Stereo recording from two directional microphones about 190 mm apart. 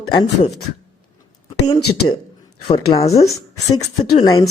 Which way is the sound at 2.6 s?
25° left (ahead or behind).